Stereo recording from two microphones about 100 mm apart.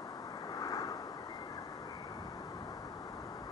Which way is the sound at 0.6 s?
40° left (ahead or behind).